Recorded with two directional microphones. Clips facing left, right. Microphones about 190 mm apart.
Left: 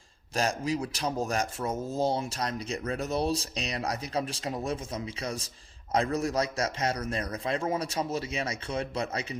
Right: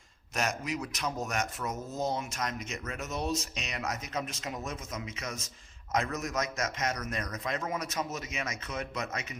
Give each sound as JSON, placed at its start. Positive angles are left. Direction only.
{"t": 0.3, "sound": "speech", "side_deg": 30}